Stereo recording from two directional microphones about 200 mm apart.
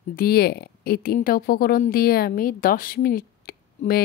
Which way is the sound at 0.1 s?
50° left (ahead or behind).